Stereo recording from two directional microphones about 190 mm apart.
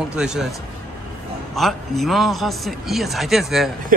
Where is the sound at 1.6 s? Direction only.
Centre (ahead or behind).